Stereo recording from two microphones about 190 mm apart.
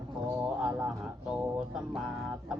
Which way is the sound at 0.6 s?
5° right (ahead or behind).